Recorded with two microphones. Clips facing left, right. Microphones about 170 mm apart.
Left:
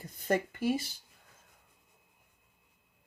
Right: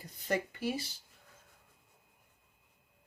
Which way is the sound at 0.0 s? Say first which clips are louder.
Left 4 dB; 50° left (ahead or behind).